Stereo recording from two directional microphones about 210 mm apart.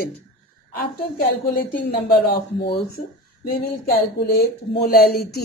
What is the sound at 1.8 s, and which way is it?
Speech, 50° left (ahead or behind).